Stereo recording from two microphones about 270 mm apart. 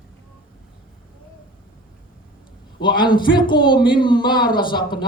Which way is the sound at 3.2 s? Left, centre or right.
Centre.